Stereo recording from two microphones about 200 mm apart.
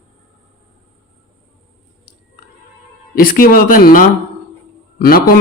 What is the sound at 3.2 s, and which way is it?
Speech, 45° left (ahead or behind).